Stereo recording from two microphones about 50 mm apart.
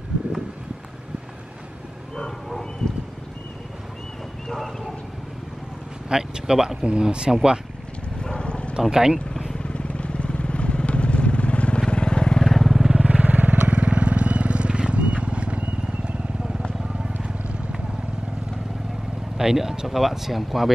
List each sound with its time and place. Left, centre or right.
2.1 s bow-wow: centre
4.5 s a sound: centre
6.0 s speech: centre
8.2 s vehicle: centre
8.9 s speech: centre
9.6 s vehicle: left
12.4 s vehicle: centre
12.8 s vehicle: centre
13.1 s vehicle: right
19.3 s speech: centre